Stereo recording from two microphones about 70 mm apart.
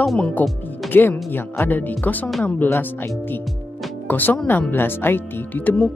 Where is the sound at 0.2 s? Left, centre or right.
Left.